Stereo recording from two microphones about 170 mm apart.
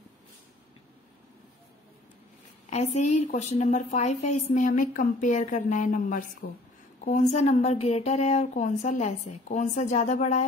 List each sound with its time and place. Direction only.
2.6 s a woman's voice: 40° left (ahead or behind)
7.1 s a woman's voice: 40° left (ahead or behind)